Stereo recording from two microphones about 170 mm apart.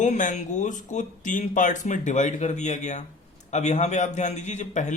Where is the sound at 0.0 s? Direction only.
45° left (ahead or behind).